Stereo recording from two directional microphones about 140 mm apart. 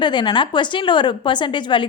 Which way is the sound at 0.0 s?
35° left (ahead or behind).